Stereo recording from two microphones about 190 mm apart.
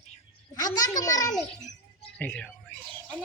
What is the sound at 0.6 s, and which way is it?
Speech, 20° left (ahead or behind).